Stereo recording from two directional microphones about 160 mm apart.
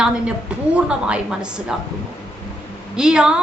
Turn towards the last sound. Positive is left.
turn(degrees=-5)  # may be behind; listen again after turning